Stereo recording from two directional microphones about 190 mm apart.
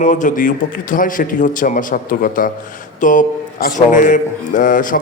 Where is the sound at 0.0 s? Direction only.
40° left (ahead or behind).